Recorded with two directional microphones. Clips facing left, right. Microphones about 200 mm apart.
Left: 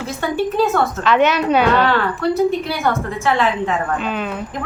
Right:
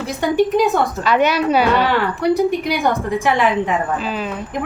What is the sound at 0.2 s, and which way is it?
Speech, 15° right (ahead or behind).